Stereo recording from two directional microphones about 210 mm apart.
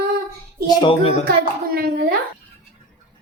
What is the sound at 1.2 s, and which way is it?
Speech, 45° right (ahead or behind).